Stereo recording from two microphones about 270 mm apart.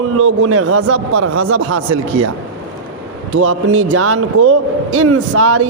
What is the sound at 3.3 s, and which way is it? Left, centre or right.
Speech, right.